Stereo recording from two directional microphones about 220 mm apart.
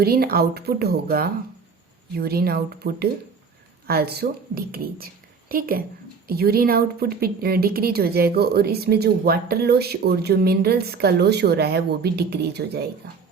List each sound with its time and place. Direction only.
0.0 s a woman's voice: 45° right (ahead or behind)